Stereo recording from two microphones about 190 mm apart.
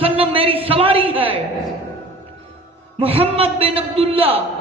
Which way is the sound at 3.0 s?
30° right (ahead or behind).